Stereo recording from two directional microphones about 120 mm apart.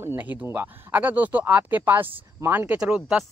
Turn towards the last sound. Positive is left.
turn(degrees=-10)  # may be behind; listen again after turning